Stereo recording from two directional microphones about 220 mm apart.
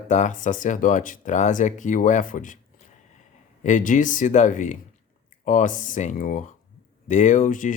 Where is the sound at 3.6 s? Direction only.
35° left (ahead or behind).